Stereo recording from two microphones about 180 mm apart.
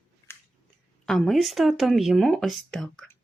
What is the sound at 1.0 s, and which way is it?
Speech, centre (ahead or behind).